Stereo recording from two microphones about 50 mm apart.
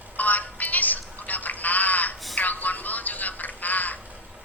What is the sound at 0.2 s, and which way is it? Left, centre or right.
Music, left.